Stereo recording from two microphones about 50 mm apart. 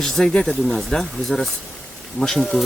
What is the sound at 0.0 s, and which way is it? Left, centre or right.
Speech, centre.